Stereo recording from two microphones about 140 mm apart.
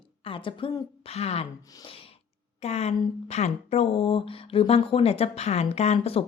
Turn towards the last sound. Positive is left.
turn(degrees=50)  # may be behind; listen again after turning